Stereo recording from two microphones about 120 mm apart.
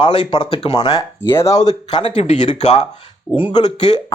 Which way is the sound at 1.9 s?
50° left (ahead or behind).